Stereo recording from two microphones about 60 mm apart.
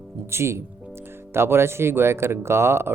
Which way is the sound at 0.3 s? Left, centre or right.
Right.